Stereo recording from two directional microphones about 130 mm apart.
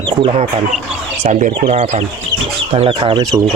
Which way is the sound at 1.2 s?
70° right (ahead or behind).